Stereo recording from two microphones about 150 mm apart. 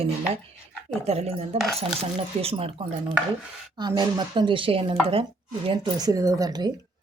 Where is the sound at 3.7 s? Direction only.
30° right (ahead or behind).